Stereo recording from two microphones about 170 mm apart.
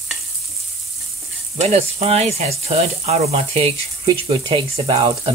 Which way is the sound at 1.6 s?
40° right (ahead or behind).